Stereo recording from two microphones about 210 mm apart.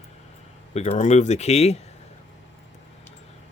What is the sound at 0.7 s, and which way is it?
Speech, 35° left (ahead or behind).